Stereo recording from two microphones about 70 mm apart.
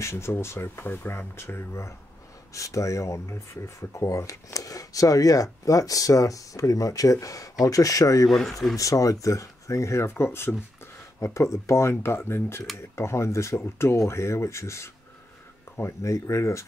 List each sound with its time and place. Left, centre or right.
0.0 s speech: left
8.3 s speech: centre
8.7 s speech: left
16.0 s speech: left